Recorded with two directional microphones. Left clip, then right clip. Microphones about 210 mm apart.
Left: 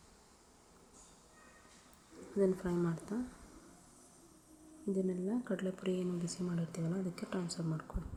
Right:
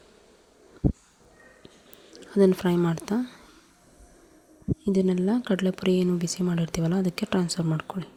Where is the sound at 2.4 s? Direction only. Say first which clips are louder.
Right 12 dB; 45° right (ahead or behind).